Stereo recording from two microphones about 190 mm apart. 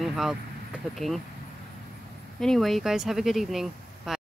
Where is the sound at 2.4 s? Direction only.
Centre (ahead or behind).